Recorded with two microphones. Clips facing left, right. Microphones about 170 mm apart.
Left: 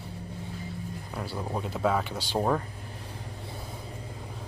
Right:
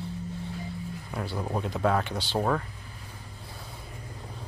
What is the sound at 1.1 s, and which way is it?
Speech, 5° left (ahead or behind).